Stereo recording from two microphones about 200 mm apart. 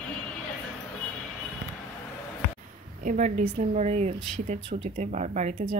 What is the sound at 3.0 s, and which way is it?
Speech, 35° right (ahead or behind).